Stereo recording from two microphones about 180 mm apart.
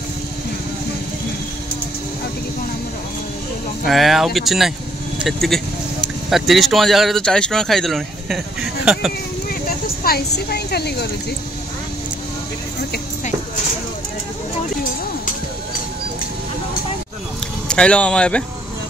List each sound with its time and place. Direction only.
3.8 s speech: centre (ahead or behind)
9.5 s speech: 55° left (ahead or behind)
17.6 s speech: 5° left (ahead or behind)